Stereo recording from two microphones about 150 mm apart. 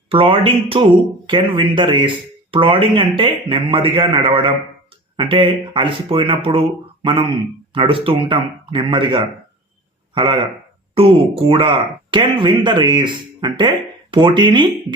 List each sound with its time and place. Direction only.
0.1 s speech: 40° right (ahead or behind)